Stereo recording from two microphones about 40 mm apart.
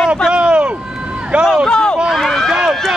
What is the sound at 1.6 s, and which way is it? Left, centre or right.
Speech, left.